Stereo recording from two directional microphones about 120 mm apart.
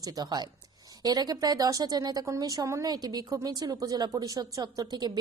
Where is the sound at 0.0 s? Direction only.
35° right (ahead or behind).